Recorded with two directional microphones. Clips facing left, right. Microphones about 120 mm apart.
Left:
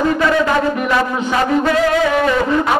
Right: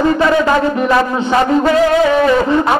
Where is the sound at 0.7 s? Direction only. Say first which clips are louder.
Right 4 dB; 30° right (ahead or behind).